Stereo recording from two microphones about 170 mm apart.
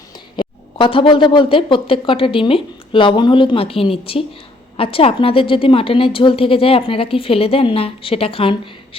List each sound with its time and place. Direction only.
0.3 s a woman's voice: 30° left (ahead or behind)